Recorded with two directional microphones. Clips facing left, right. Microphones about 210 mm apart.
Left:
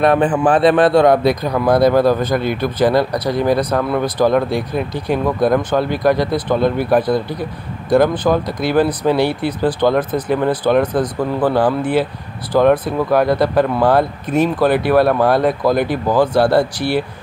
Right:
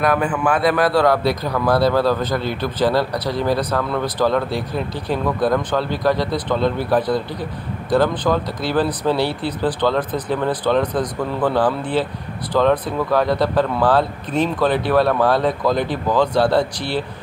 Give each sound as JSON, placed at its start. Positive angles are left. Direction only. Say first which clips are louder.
{"t": 0.0, "sound": "a man's voice", "louder": "left 5 dB", "side_deg": 30}